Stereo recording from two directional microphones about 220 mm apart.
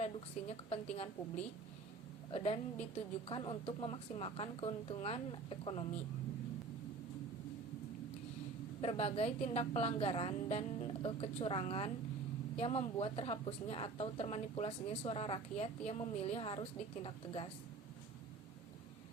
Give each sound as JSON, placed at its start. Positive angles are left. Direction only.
{"t": 0.0, "sound": "a woman's voice", "side_deg": 25}
{"t": 2.3, "sound": "a woman's voice", "side_deg": 25}
{"t": 8.8, "sound": "a woman's voice", "side_deg": 30}